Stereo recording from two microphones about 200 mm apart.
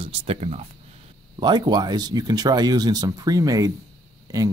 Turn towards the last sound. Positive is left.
turn(degrees=-15)  # may be behind; listen again after turning